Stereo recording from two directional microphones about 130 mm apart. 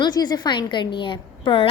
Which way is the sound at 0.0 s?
30° left (ahead or behind).